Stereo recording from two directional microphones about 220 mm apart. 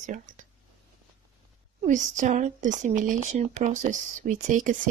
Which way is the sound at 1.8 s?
35° right (ahead or behind).